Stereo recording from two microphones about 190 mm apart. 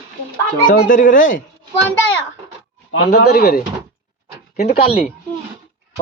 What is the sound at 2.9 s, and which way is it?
Speech, 65° left (ahead or behind).